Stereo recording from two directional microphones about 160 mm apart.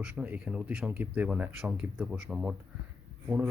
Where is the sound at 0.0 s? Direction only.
10° right (ahead or behind).